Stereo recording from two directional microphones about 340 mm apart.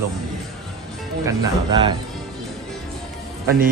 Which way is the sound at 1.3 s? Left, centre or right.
Centre.